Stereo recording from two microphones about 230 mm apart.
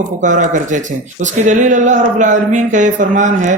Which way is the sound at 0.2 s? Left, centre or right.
Right.